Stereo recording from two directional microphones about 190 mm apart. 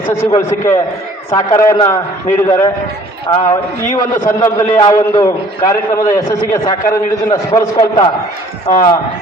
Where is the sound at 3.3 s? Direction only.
20° left (ahead or behind).